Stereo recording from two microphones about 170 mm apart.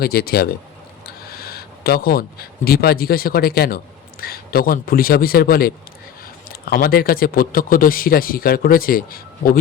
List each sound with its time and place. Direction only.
0.0 s a man's voice: 65° left (ahead or behind)